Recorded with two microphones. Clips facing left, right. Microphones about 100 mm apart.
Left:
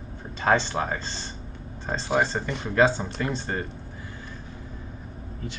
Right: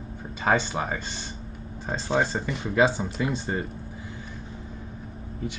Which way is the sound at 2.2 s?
10° right (ahead or behind).